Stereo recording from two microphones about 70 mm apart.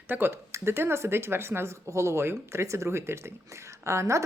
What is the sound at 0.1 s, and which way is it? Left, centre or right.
Speech, right.